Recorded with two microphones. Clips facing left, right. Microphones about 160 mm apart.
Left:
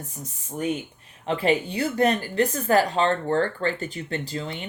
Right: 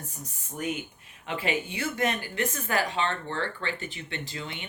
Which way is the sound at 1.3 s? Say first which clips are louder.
Left 7 dB; 35° left (ahead or behind).